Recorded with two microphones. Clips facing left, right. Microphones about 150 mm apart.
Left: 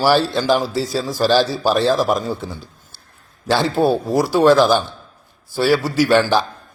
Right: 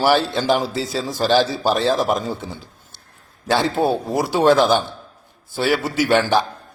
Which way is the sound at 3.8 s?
20° right (ahead or behind).